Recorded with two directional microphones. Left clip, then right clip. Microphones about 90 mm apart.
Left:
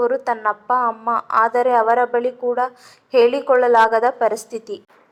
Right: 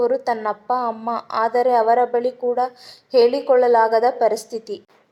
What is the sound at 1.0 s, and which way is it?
Speech, 40° right (ahead or behind).